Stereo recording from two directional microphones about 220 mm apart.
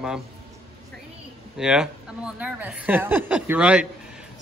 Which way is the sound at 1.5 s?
5° right (ahead or behind).